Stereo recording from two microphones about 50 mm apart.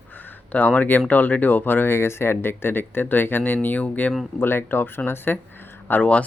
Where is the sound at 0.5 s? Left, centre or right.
Left.